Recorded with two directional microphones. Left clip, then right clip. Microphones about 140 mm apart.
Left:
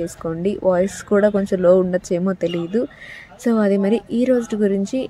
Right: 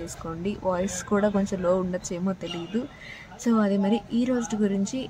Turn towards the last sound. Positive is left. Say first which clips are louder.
# left 8 dB
turn(degrees=30)  # may be behind; listen again after turning